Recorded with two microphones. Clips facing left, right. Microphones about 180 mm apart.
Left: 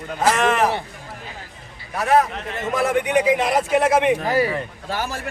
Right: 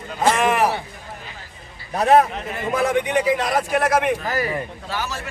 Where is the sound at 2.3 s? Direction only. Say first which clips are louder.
Even; centre (ahead or behind).